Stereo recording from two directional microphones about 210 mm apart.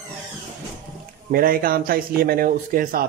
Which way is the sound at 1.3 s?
45° right (ahead or behind).